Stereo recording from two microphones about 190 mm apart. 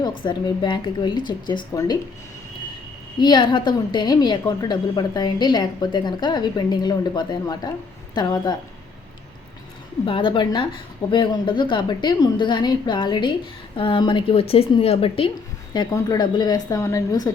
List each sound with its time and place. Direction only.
0.0 s a woman's voice: 25° left (ahead or behind)
3.2 s a woman's voice: 25° left (ahead or behind)
10.1 s a woman's voice: 25° left (ahead or behind)